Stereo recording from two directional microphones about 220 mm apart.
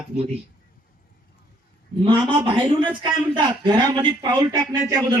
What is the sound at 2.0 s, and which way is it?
A man's voice, 20° right (ahead or behind).